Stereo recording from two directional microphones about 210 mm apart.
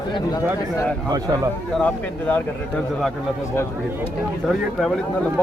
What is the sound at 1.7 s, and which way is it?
Speech, 5° left (ahead or behind).